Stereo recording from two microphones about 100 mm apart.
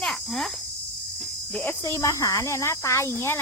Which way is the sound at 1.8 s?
30° left (ahead or behind).